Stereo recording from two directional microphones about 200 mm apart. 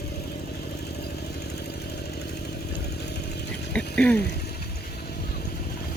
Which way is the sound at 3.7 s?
5° left (ahead or behind).